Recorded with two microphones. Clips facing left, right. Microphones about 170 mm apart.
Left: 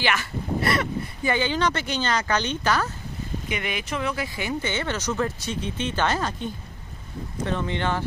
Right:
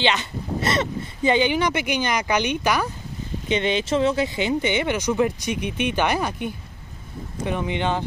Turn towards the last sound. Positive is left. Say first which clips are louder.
# right 2 dB
turn(degrees=-15)  # may be behind; listen again after turning